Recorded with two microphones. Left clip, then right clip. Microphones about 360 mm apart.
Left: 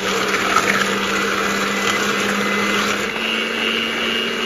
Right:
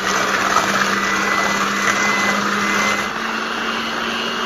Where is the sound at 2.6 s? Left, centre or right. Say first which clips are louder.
Right 1 dB; centre.